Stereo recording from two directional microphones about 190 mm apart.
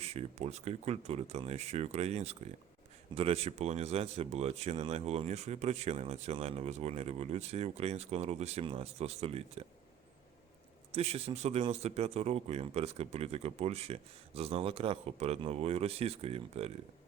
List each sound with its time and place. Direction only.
0.0 s speech: 35° right (ahead or behind)
10.9 s speech: 30° right (ahead or behind)